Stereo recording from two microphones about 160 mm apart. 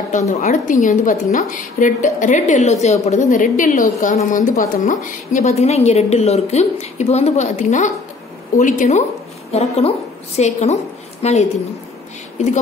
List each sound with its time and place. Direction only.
0.3 s a woman's voice: 50° left (ahead or behind)
12.4 s a woman's voice: 50° left (ahead or behind)